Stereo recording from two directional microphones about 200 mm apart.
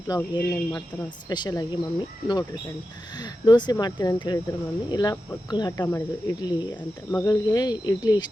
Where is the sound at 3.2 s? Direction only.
20° left (ahead or behind).